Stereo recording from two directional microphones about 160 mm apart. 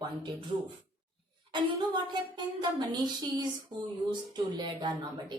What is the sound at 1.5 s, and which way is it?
Speech, 25° right (ahead or behind).